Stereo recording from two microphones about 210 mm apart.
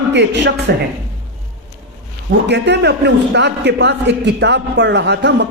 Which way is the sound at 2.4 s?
55° right (ahead or behind).